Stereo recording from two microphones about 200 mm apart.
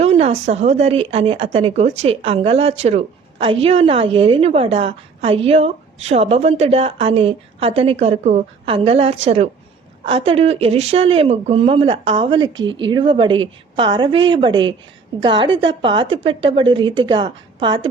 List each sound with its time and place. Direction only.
0.0 s speech: 30° right (ahead or behind)